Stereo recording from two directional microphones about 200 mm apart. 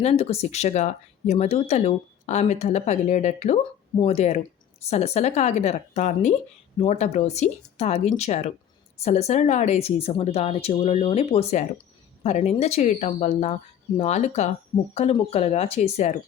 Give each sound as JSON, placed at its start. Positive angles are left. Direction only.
{"t": 0.0, "sound": "speech", "side_deg": 30}